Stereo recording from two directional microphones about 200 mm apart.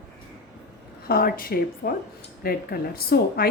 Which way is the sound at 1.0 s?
50° left (ahead or behind).